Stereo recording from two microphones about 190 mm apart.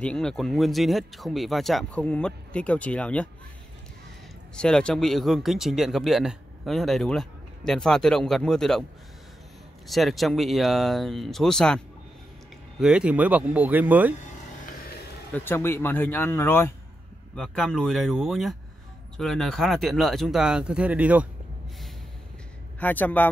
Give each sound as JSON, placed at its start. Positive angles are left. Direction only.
{"t": 0.0, "sound": "speech", "side_deg": 5}
{"t": 4.6, "sound": "speech", "side_deg": 5}
{"t": 9.8, "sound": "speech", "side_deg": 0}
{"t": 14.7, "sound": "a sound", "side_deg": 50}
{"t": 15.3, "sound": "speech", "side_deg": 10}
{"t": 22.8, "sound": "speech", "side_deg": 10}